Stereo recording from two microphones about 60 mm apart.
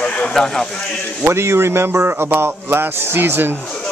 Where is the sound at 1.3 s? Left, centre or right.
Right.